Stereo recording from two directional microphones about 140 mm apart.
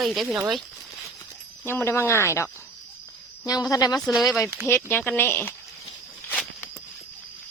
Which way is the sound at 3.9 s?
Centre (ahead or behind).